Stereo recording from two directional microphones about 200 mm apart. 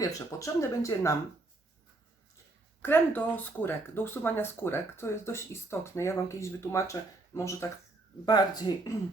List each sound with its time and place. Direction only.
0.0 s speech: 15° left (ahead or behind)
2.8 s speech: 10° left (ahead or behind)